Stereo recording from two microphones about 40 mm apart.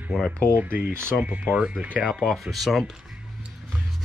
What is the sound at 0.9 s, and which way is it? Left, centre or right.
Speech, right.